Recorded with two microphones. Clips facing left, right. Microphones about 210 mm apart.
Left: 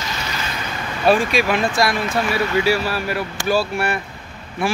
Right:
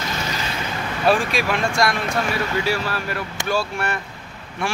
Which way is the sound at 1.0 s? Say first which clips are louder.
Left 3 dB; centre (ahead or behind).